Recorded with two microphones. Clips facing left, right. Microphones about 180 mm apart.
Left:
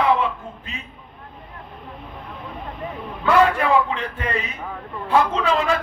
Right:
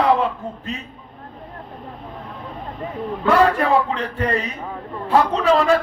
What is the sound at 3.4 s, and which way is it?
Speech, 40° right (ahead or behind).